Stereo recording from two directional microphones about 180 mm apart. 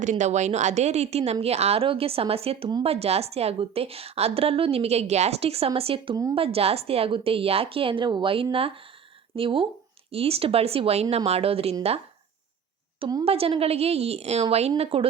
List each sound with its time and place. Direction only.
0.0 s a woman's voice: 40° right (ahead or behind)
13.0 s speech: 20° right (ahead or behind)
13.2 s a woman's voice: 35° right (ahead or behind)